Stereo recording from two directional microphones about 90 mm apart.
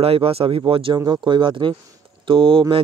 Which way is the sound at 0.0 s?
90° right.